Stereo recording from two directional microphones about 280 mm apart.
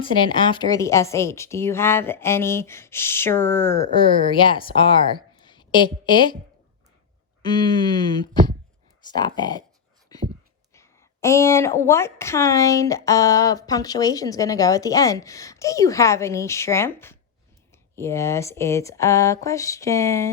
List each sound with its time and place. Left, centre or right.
0.0 s a woman's voice: centre
7.4 s a woman's voice: centre
10.1 s a sound: centre
10.8 s a woman's voice: centre